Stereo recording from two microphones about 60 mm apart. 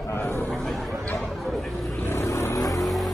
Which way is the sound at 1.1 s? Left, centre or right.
Centre.